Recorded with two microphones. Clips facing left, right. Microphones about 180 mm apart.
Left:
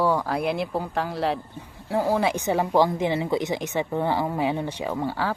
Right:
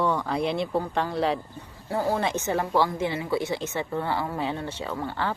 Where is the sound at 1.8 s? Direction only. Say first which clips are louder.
Left 3 dB; 10° left (ahead or behind).